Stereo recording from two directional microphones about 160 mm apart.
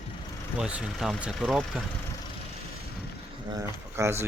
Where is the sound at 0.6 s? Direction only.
5° right (ahead or behind).